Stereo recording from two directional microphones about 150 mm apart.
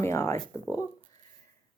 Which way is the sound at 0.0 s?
15° left (ahead or behind).